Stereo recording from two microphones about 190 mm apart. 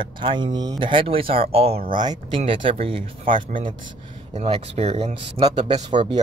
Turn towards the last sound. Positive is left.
turn(degrees=-25)  # may be behind; listen again after turning